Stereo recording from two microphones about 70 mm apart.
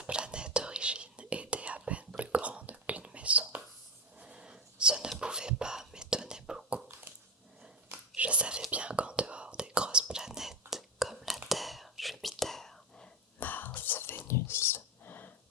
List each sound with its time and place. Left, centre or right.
0.0 s whispering: centre
8.1 s whispering: centre
13.4 s whispering: left
13.7 s music: left
14.3 s a sound: left